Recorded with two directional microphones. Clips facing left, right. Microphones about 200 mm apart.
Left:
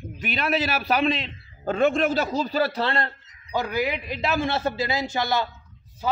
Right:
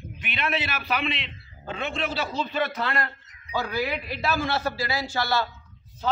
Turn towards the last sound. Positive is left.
turn(degrees=20)  # may be behind; listen again after turning